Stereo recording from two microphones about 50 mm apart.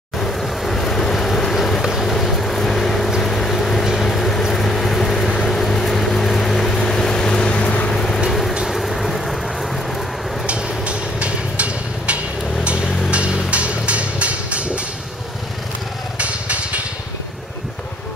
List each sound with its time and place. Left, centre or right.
0.2 s vehicle: centre
3.2 s boat: centre
3.9 s vehicle: centre
10.4 s vehicle: right
16.2 s vehicle: right